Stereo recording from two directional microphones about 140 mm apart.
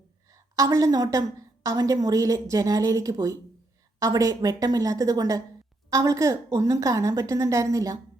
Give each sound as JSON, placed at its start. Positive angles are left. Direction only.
{"t": 0.3, "sound": "a woman's voice", "side_deg": -25}